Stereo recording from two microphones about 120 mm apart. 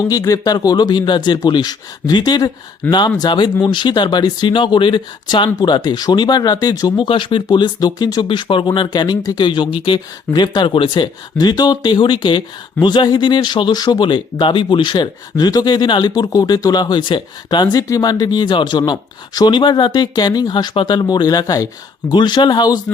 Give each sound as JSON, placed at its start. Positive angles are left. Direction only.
{"t": 0.0, "sound": "speech", "side_deg": 30}
{"t": 2.8, "sound": "speech", "side_deg": 10}
{"t": 3.2, "sound": "speech", "side_deg": 40}